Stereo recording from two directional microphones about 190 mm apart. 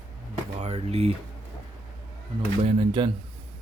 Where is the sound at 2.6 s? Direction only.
30° right (ahead or behind).